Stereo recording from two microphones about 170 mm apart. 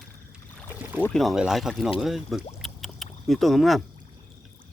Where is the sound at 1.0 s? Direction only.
Centre (ahead or behind).